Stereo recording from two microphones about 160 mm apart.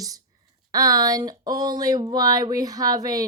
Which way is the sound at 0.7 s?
25° right (ahead or behind).